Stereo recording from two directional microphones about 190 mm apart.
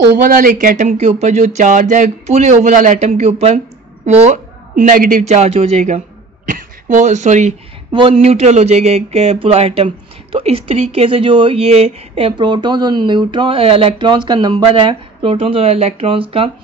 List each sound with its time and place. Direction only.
0.2 s speech: 45° right (ahead or behind)
7.9 s speech: 30° right (ahead or behind)